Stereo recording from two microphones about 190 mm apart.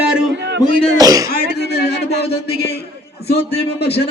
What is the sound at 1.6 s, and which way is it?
Speech, 60° left (ahead or behind).